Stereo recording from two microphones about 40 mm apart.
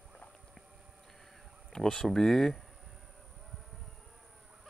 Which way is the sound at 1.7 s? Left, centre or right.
Centre.